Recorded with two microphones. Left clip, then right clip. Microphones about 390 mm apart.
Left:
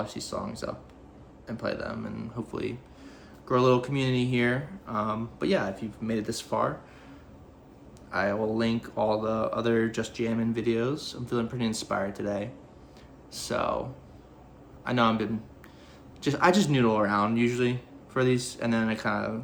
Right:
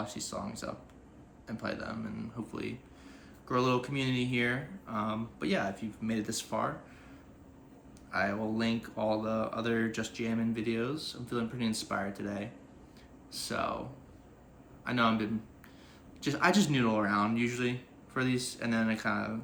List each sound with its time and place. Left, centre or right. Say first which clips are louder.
0.0 s speech: left 5 dB; centre
8.1 s speech: left 5 dB; centre
14.8 s speech: left 4 dB; centre